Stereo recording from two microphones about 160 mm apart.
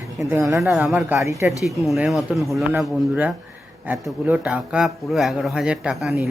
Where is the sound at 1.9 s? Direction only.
Centre (ahead or behind).